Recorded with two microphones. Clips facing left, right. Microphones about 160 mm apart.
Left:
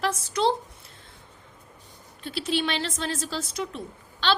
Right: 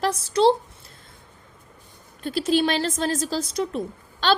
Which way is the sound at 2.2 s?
45° right (ahead or behind).